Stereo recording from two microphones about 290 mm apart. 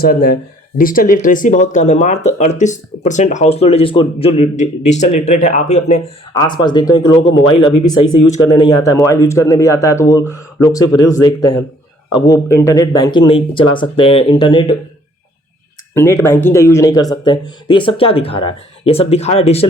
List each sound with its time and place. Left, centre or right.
0.0 s speech: left; by 7.2 s centre
8.3 s speech: centre
16.0 s speech: centre